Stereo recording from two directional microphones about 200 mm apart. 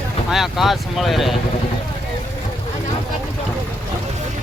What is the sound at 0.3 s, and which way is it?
Speech, centre (ahead or behind).